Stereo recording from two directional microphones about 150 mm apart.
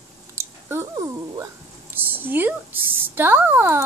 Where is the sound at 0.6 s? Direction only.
20° right (ahead or behind).